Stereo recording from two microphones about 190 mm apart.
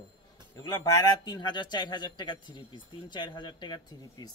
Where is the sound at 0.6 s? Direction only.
20° left (ahead or behind).